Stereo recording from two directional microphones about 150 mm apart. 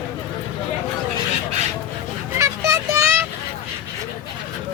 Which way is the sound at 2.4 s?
20° right (ahead or behind).